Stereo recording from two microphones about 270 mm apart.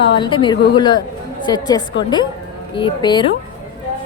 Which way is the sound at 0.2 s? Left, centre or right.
Centre.